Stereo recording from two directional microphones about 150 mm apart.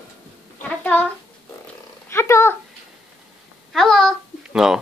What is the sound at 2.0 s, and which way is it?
Purr, 15° left (ahead or behind).